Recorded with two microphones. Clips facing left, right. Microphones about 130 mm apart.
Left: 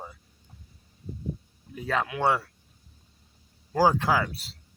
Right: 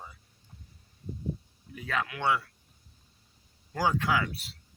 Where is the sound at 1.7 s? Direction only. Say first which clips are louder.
Left 5 dB; 30° left (ahead or behind).